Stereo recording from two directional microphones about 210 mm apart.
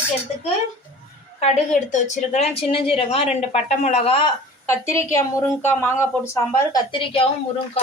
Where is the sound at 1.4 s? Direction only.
30° left (ahead or behind).